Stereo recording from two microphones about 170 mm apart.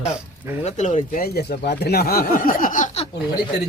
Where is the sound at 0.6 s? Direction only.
45° left (ahead or behind).